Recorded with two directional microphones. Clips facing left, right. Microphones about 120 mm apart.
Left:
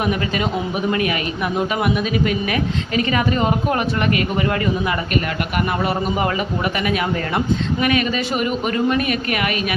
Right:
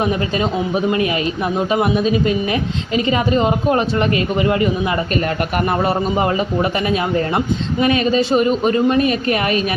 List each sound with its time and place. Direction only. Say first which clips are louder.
0.0 s a man's voice: right 2 dB; 30° right (ahead or behind)
5.8 s a man's voice: right 3 dB; 30° right (ahead or behind)